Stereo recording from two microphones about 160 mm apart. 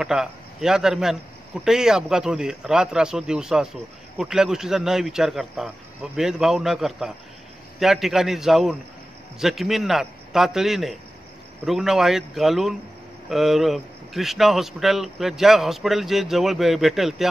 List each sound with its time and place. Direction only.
0.0 s a man's voice: 5° right (ahead or behind)